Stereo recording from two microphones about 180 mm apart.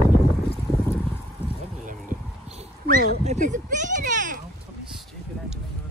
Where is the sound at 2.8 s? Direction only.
50° right (ahead or behind).